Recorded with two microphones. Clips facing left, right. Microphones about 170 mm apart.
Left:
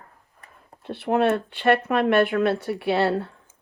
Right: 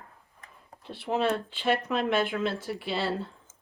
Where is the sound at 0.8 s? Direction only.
60° left (ahead or behind).